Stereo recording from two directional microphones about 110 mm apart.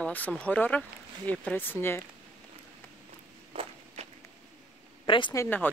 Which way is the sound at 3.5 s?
85° right.